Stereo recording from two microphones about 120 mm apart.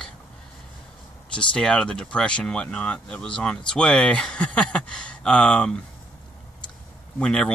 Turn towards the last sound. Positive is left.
turn(degrees=5)  # may be behind; listen again after turning